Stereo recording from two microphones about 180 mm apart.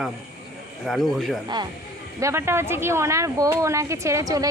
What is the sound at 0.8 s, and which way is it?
Speech, centre (ahead or behind).